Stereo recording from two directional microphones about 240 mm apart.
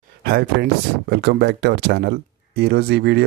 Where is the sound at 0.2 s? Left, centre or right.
Right.